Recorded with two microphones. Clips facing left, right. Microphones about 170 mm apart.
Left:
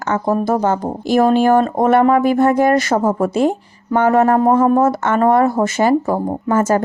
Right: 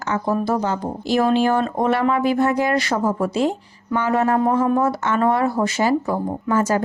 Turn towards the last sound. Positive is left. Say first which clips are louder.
# left 4 dB
turn(degrees=50)  # may be behind; listen again after turning